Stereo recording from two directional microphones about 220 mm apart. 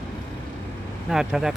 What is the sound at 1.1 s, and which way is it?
Speech, 5° right (ahead or behind).